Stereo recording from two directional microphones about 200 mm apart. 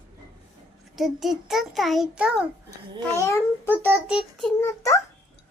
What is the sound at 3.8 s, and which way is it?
Speech, 5° right (ahead or behind).